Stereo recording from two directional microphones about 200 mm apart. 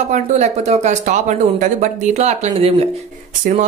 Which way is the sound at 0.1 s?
35° right (ahead or behind).